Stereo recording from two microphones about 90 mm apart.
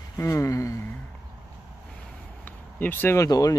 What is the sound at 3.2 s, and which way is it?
Speech, 40° left (ahead or behind).